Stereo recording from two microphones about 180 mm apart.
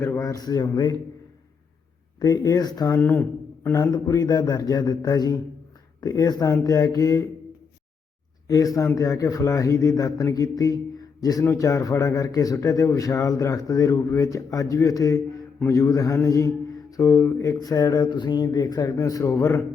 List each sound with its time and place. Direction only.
0.0 s speech: 15° left (ahead or behind)
2.1 s speech: 20° left (ahead or behind)
8.4 s a man's voice: 20° left (ahead or behind)